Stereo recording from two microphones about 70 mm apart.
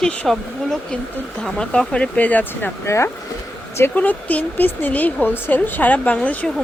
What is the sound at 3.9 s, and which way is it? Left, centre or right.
Speech, left.